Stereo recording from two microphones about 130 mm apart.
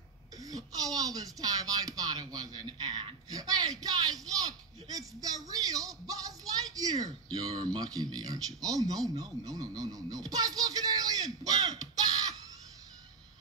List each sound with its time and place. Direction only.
0.4 s speech: 30° right (ahead or behind)